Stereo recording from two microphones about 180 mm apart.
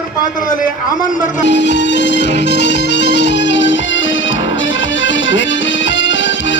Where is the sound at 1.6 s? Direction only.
75° left (ahead or behind).